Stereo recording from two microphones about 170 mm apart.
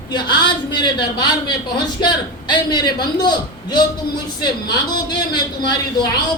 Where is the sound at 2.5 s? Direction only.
25° left (ahead or behind).